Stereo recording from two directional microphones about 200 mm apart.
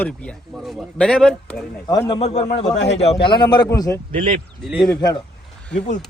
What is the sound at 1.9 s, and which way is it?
Speech, 20° left (ahead or behind).